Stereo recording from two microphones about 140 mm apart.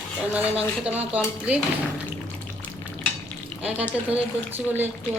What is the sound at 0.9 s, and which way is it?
Speech, 10° right (ahead or behind).